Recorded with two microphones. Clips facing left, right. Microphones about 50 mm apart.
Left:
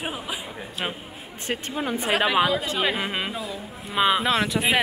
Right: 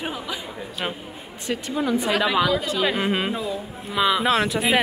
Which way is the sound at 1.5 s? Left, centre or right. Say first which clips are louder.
Right 4 dB; left.